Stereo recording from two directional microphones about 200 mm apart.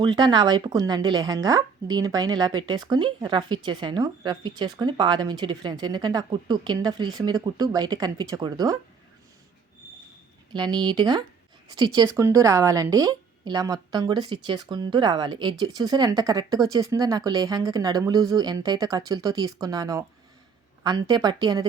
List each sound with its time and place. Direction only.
0.0 s speech: 20° right (ahead or behind)
10.5 s speech: 20° right (ahead or behind)